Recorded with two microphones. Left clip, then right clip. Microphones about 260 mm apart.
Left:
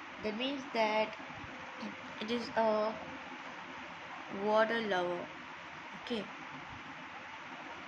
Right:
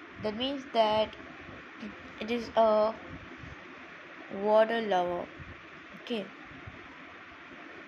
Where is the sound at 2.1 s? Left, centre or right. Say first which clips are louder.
Right 7 dB; centre.